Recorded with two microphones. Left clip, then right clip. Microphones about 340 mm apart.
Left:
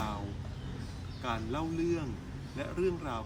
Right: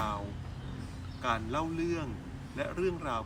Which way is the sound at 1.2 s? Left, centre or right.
Centre.